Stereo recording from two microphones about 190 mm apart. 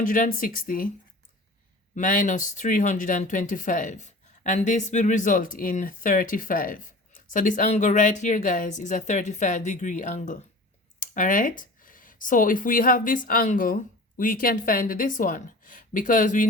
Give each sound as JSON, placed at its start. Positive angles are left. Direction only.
{"t": 0.0, "sound": "speech", "side_deg": 45}
{"t": 2.0, "sound": "speech", "side_deg": 45}